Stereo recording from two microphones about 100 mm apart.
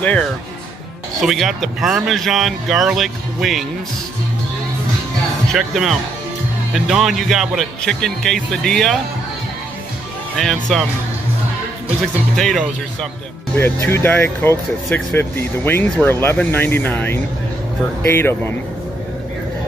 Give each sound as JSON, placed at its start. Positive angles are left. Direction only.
{"t": 0.0, "sound": "speech", "side_deg": 15}
{"t": 1.2, "sound": "speech", "side_deg": 0}
{"t": 5.5, "sound": "speech", "side_deg": -5}
{"t": 10.3, "sound": "speech", "side_deg": 0}
{"t": 12.4, "sound": "speech", "side_deg": 5}
{"t": 13.6, "sound": "speech", "side_deg": 25}